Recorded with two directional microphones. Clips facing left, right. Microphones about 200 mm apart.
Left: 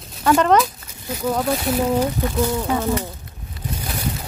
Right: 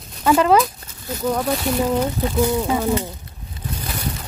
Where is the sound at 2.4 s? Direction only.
15° right (ahead or behind).